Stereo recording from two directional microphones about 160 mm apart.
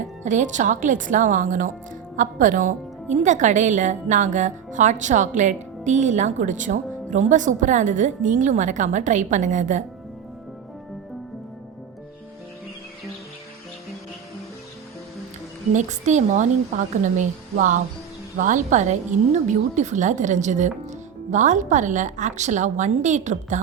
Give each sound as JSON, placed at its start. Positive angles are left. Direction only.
{"t": 0.2, "sound": "a woman's voice", "side_deg": -50}
{"t": 15.7, "sound": "a woman's voice", "side_deg": -50}